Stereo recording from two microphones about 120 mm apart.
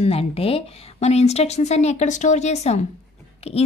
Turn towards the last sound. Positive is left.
turn(degrees=55)  # may be behind; listen again after turning